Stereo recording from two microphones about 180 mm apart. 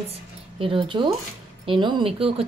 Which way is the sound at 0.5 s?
30° right (ahead or behind).